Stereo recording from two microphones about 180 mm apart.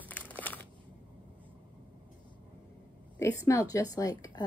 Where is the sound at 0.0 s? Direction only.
10° left (ahead or behind).